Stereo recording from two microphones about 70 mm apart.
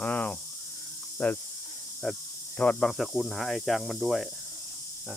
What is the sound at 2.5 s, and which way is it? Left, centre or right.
Speech, centre.